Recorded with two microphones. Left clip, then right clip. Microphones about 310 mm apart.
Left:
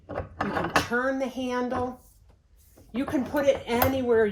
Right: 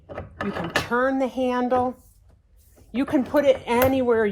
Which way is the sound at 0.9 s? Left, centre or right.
Centre.